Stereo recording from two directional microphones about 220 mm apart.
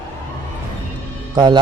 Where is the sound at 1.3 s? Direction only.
20° right (ahead or behind).